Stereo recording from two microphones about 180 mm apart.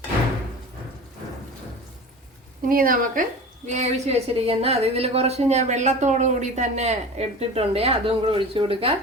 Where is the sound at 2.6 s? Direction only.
50° right (ahead or behind); by 8.9 s 30° right (ahead or behind).